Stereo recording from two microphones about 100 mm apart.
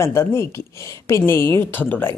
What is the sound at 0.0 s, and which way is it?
A woman's voice, 25° left (ahead or behind).